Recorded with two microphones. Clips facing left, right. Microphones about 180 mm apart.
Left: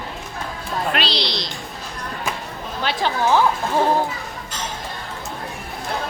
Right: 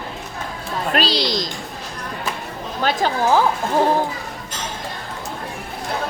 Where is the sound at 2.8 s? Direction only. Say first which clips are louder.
Right 2 dB; 40° right (ahead or behind).